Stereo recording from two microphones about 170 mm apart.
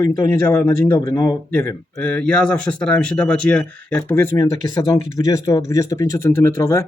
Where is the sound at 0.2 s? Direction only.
15° left (ahead or behind).